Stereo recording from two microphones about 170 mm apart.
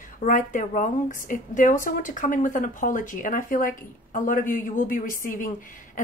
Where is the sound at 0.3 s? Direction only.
50° left (ahead or behind).